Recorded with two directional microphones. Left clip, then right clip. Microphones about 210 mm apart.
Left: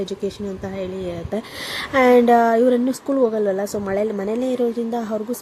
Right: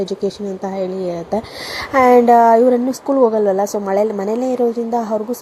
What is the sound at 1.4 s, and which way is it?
Speech, 25° left (ahead or behind).